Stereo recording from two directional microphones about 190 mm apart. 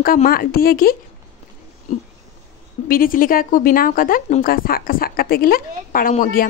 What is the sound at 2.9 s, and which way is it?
A woman's voice, 45° left (ahead or behind).